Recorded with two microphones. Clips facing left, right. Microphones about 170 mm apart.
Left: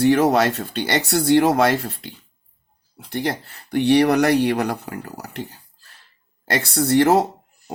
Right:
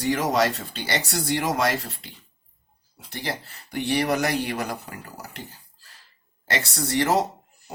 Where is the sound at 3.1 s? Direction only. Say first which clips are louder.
Left 7 dB; 55° left (ahead or behind).